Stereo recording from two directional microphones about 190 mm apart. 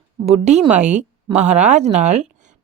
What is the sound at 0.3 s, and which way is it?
A woman's voice, 35° right (ahead or behind).